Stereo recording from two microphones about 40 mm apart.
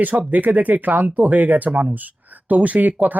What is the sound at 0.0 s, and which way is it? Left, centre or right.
Speech, right.